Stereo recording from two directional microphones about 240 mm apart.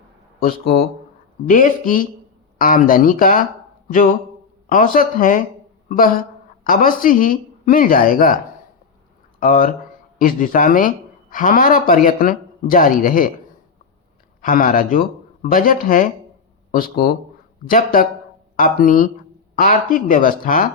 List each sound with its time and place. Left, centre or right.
0.3 s speech: left
4.7 s speech: left
9.4 s speech: left
14.4 s speech: left